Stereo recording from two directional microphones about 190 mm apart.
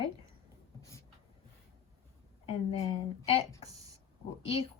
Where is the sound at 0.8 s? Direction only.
15° left (ahead or behind).